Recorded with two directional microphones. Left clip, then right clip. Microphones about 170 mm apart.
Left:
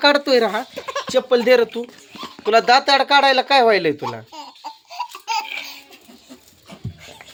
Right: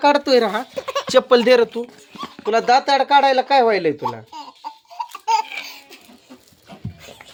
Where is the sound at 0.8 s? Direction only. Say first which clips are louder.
Right 6 dB; 45° right (ahead or behind).